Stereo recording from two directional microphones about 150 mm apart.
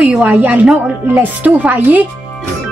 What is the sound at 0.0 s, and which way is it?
Speech, 5° right (ahead or behind).